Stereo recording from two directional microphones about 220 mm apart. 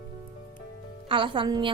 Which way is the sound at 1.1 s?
25° right (ahead or behind).